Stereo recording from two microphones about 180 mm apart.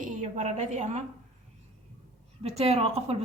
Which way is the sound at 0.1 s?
40° right (ahead or behind).